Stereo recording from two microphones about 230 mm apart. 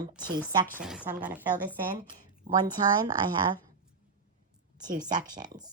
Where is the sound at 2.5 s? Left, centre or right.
Right.